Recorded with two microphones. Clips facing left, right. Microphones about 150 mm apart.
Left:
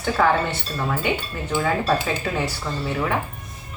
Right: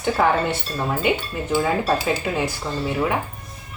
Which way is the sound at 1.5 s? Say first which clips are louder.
Right 1 dB; 10° right (ahead or behind).